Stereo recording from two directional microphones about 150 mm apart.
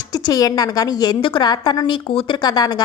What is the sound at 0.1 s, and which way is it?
A woman's voice, 25° left (ahead or behind).